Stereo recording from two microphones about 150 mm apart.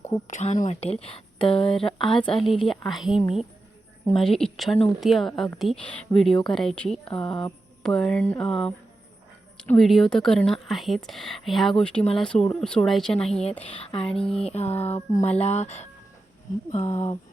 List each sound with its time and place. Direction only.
0.3 s speech: 55° left (ahead or behind); by 2.0 s 35° left (ahead or behind)
2.0 s speech: 5° left (ahead or behind)
13.4 s speech: 40° left (ahead or behind)
14.2 s speech: 5° left (ahead or behind)
14.4 s speech: 45° left (ahead or behind)